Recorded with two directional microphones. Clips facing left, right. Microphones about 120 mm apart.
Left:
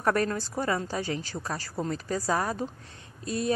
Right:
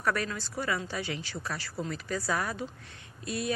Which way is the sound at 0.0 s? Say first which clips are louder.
Left 5 dB; 40° left (ahead or behind).